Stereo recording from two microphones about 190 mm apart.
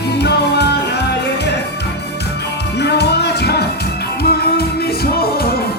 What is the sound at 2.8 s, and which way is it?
Music, 60° left (ahead or behind).